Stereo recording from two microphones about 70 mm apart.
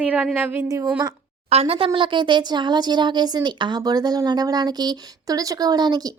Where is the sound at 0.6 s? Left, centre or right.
Right.